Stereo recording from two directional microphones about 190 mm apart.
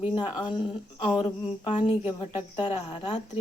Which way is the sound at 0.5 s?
25° left (ahead or behind).